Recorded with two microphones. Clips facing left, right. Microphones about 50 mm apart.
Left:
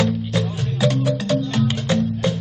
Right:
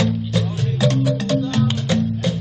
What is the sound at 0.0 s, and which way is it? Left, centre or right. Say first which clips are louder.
Music: even; centre.